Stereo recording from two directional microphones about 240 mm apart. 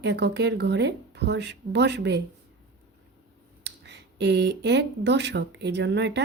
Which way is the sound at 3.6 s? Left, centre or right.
Right.